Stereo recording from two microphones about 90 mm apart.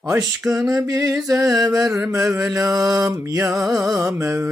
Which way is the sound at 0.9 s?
40° right (ahead or behind).